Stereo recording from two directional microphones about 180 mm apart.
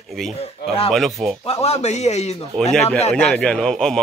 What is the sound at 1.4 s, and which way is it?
Speech, 35° left (ahead or behind).